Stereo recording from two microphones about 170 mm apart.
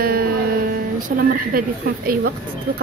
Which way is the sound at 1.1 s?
55° right (ahead or behind).